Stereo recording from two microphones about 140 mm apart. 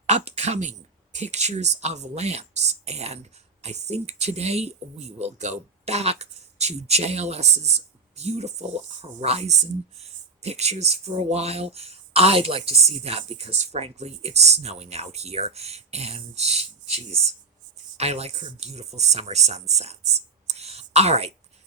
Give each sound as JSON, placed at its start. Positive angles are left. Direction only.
{"t": 0.1, "sound": "speech", "side_deg": -50}